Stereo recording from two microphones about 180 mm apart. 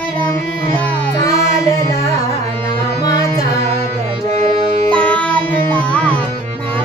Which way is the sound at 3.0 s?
20° left (ahead or behind).